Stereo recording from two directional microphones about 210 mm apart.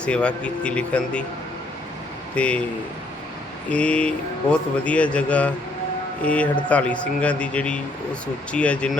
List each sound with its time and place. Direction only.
0.0 s speech: 5° left (ahead or behind)
2.3 s speech: 5° left (ahead or behind)
3.7 s a man's voice: 5° left (ahead or behind)